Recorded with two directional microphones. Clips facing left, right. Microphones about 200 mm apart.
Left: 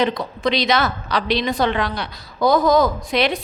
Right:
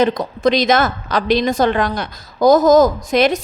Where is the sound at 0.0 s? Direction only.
45° right (ahead or behind).